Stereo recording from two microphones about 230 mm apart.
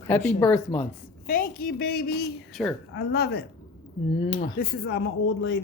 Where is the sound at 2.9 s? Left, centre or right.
Left.